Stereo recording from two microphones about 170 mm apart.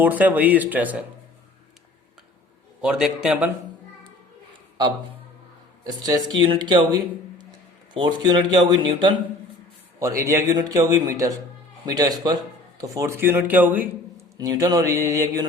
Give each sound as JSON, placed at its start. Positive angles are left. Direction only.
{"t": 0.0, "sound": "speech", "side_deg": -10}
{"t": 2.8, "sound": "a man's voice", "side_deg": -5}
{"t": 5.8, "sound": "speech", "side_deg": -20}
{"t": 14.3, "sound": "speech", "side_deg": -20}